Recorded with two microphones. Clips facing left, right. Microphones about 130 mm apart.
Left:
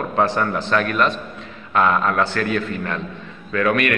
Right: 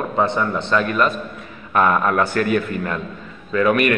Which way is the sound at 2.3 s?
50° right (ahead or behind).